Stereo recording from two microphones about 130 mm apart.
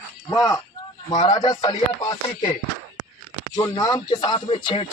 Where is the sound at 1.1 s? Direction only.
30° left (ahead or behind).